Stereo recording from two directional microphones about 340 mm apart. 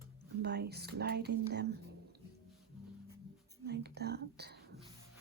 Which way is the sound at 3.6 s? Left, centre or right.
Right.